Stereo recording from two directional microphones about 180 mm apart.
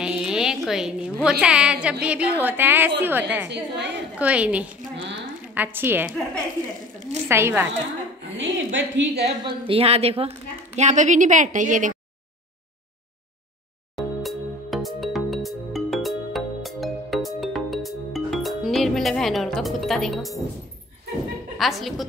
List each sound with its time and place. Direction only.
0.0 s a sound: 5° right (ahead or behind)
1.4 s a woman's voice: 5° right (ahead or behind)
3.4 s a woman's voice: 70° right (ahead or behind)
4.2 s a woman's voice: 5° right (ahead or behind)
7.2 s a woman's voice: 15° right (ahead or behind)
8.4 s a woman's voice: 90° right
9.1 s a woman's voice: 30° right (ahead or behind)
13.9 s music: centre (ahead or behind)
21.5 s a woman's voice: centre (ahead or behind)